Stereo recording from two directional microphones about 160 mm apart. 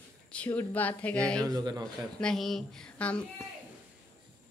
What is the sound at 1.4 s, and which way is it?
Speech, 25° right (ahead or behind).